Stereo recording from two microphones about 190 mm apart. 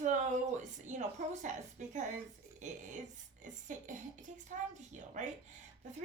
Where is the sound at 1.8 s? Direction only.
40° right (ahead or behind).